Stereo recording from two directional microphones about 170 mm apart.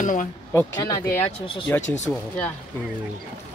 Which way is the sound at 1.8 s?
45° left (ahead or behind).